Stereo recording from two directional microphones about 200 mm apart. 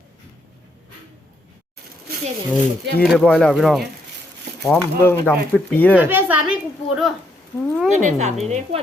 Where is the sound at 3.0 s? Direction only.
Centre (ahead or behind).